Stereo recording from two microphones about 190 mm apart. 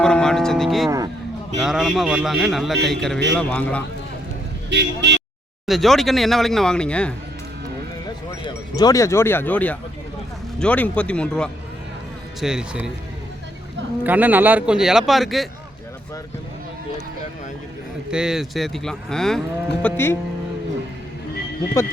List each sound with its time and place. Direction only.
0.0 s music: 5° left (ahead or behind)
0.9 s speech: 20° right (ahead or behind)
1.5 s speech: centre (ahead or behind)
4.7 s speech: 65° right (ahead or behind)
5.6 s speech: centre (ahead or behind)
8.0 s a sound: 20° left (ahead or behind)
10.6 s speech: 5° left (ahead or behind)
14.0 s speech: 10° right (ahead or behind)
18.1 s speech: 5° right (ahead or behind); by 20.1 s 10° left (ahead or behind)